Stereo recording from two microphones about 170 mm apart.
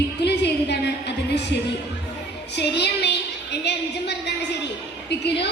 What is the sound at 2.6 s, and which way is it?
A woman's voice, 90° left.